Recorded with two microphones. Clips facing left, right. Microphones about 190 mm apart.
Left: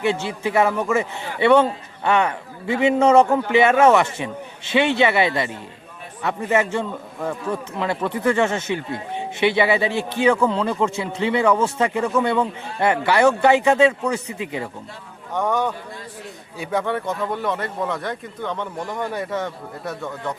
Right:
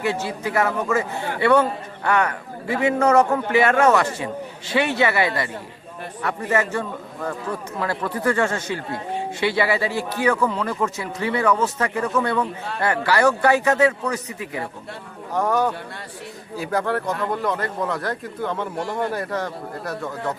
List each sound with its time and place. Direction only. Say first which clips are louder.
0.0 s a man's voice: left 2 dB; 25° left (ahead or behind)
15.3 s a man's voice: right 1 dB; centre (ahead or behind)